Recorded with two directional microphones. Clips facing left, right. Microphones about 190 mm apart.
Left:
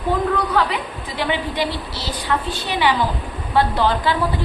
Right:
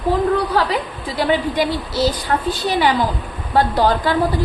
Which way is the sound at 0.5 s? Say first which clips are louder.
Right 2 dB; 35° right (ahead or behind).